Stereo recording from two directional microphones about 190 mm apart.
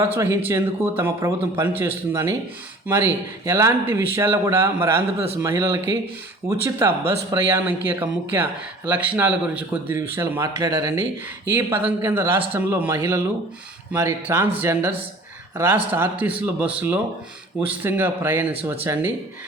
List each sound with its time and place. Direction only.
0.0 s a man's voice: 10° right (ahead or behind)
5.1 s speech: 30° right (ahead or behind)
5.4 s a man's voice: 15° right (ahead or behind)